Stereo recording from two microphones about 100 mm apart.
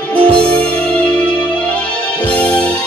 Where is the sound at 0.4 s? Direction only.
10° left (ahead or behind).